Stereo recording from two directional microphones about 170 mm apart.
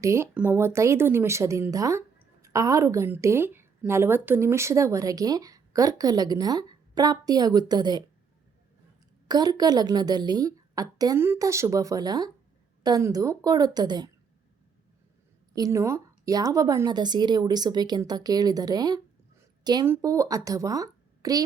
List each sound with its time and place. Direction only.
0.0 s speech: 15° right (ahead or behind)
9.2 s a woman's voice: 25° right (ahead or behind)
15.5 s a woman's voice: 20° right (ahead or behind)